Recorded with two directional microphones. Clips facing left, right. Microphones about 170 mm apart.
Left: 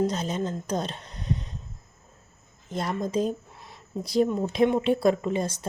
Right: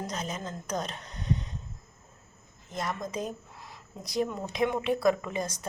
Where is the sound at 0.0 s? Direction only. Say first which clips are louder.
Left 9 dB; 30° left (ahead or behind).